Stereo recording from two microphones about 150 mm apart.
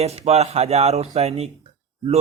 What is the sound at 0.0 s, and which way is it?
Speech, 45° right (ahead or behind).